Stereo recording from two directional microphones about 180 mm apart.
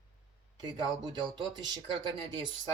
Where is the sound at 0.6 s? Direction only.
25° right (ahead or behind).